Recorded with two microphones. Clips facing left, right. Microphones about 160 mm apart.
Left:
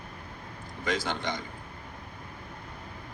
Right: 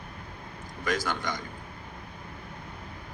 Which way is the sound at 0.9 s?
25° left (ahead or behind).